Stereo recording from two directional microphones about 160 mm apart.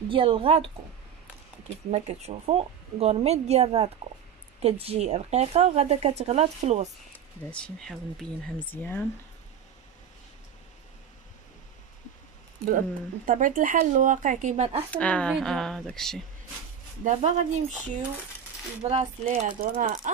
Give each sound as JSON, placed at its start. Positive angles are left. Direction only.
{"t": 0.1, "sound": "speech", "side_deg": -35}
{"t": 1.9, "sound": "speech", "side_deg": -45}
{"t": 7.1, "sound": "speech", "side_deg": 5}
{"t": 12.6, "sound": "speech", "side_deg": -60}
{"t": 14.9, "sound": "speech", "side_deg": 5}
{"t": 17.0, "sound": "speech", "side_deg": -45}
{"t": 19.6, "sound": "speech", "side_deg": -70}